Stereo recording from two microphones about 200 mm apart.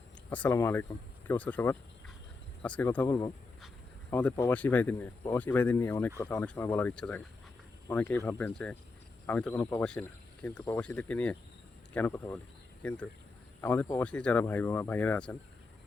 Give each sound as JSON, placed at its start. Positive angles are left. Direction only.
{"t": 0.3, "sound": "speech", "side_deg": 5}